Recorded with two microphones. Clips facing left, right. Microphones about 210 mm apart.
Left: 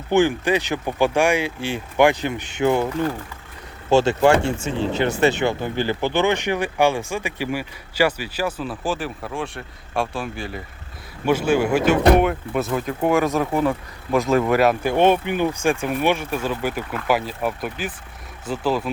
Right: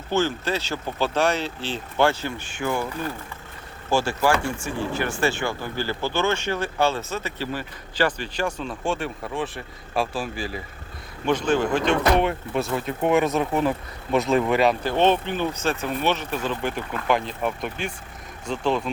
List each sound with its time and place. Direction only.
0.1 s speech: 15° left (ahead or behind)
3.8 s speech: 20° left (ahead or behind); by 18.8 s 5° left (ahead or behind)